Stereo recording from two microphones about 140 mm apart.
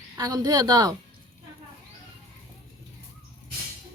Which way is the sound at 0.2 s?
30° right (ahead or behind).